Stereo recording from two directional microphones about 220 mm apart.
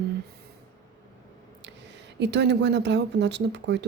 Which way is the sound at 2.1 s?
50° right (ahead or behind).